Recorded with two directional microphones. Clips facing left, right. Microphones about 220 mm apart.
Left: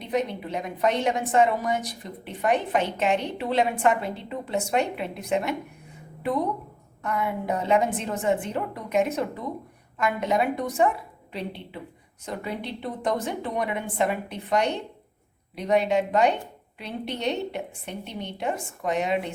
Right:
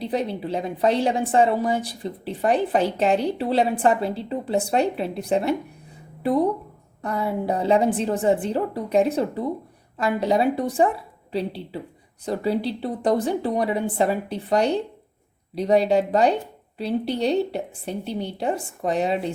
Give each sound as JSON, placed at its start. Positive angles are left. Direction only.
{"t": 0.0, "sound": "a woman's voice", "side_deg": -30}